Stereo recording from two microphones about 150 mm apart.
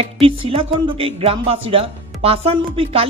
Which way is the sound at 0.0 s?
40° right (ahead or behind).